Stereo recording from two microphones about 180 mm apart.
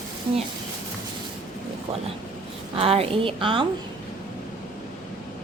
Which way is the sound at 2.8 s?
35° right (ahead or behind).